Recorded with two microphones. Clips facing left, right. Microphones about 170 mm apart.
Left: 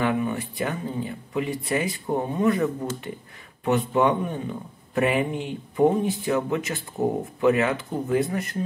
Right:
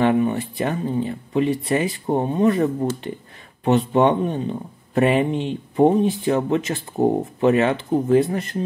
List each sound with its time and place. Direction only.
0.0 s speech: 30° right (ahead or behind)